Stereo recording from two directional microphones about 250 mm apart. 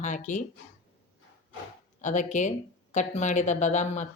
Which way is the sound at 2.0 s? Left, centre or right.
Left.